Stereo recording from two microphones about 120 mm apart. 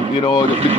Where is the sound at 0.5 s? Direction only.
55° right (ahead or behind).